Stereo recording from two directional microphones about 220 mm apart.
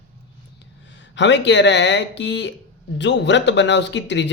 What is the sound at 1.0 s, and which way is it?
Speech, 55° left (ahead or behind).